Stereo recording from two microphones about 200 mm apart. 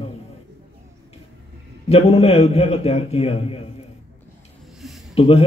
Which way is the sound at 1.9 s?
30° left (ahead or behind).